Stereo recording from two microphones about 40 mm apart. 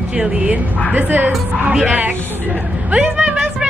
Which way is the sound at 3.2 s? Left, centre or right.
Centre.